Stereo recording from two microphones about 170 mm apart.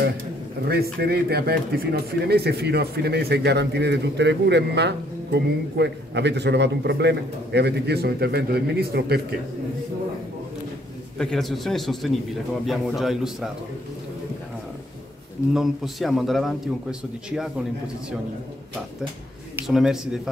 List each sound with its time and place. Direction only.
0.7 s a man's voice: 65° right (ahead or behind)
11.1 s speech: 5° left (ahead or behind)
15.5 s speech: centre (ahead or behind)
19.5 s speech: 5° right (ahead or behind)